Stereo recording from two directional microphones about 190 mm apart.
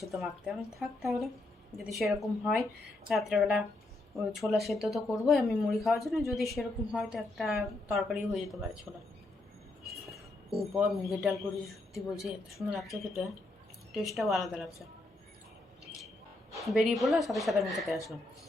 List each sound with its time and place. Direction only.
0.0 s a woman's voice: centre (ahead or behind)
10.8 s a woman's voice: centre (ahead or behind)
16.6 s a woman's voice: centre (ahead or behind)